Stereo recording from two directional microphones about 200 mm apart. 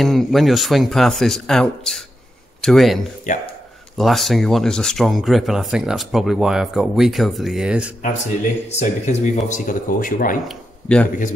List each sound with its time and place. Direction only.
0.0 s speech: centre (ahead or behind)
3.3 s speech: 40° left (ahead or behind)
4.0 s speech: centre (ahead or behind)
8.6 s speech: 35° left (ahead or behind)
10.5 s speech: 5° left (ahead or behind)